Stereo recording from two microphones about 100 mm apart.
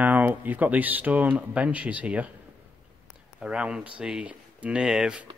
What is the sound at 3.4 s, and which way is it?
Speech, 10° right (ahead or behind).